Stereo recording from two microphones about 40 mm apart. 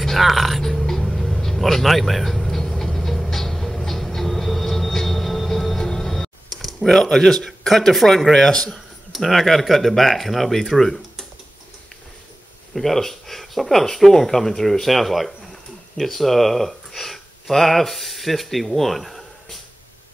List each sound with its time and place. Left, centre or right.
0.0 s music: centre
8.3 s a man's voice: centre
9.1 s speech: centre
12.7 s speech: centre